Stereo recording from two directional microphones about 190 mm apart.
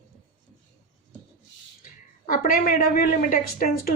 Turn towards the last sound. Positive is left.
turn(degrees=50)  # may be behind; listen again after turning